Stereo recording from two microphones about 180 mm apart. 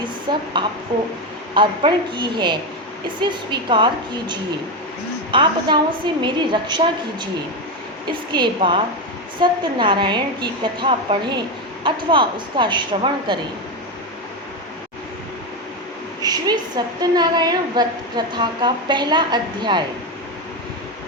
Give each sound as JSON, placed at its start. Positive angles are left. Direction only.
{"t": 0.3, "sound": "a woman's voice", "side_deg": -25}
{"t": 1.5, "sound": "a woman's voice", "side_deg": -25}
{"t": 5.3, "sound": "a woman's voice", "side_deg": -25}
{"t": 8.3, "sound": "a woman's voice", "side_deg": -25}
{"t": 16.2, "sound": "a woman's voice", "side_deg": -20}